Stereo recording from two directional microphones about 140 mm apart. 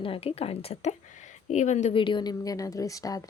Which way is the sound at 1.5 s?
55° left (ahead or behind).